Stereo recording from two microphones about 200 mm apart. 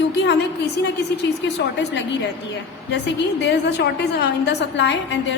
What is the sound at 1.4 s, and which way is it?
A woman's voice, 60° left (ahead or behind).